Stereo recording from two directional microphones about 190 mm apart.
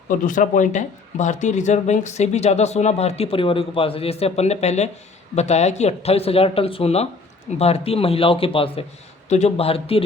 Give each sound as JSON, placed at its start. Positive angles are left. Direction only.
{"t": 0.3, "sound": "speech", "side_deg": 45}